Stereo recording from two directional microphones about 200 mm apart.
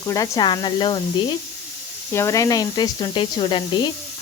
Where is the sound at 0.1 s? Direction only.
20° left (ahead or behind).